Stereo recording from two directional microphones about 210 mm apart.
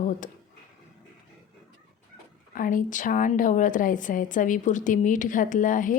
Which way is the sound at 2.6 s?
40° left (ahead or behind).